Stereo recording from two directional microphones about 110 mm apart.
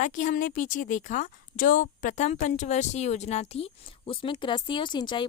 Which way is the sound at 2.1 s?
90° left.